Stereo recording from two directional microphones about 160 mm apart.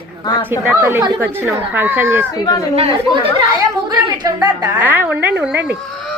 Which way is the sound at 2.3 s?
25° left (ahead or behind).